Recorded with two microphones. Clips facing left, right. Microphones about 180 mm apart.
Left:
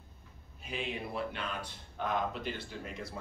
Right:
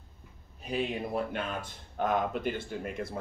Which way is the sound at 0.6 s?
40° right (ahead or behind).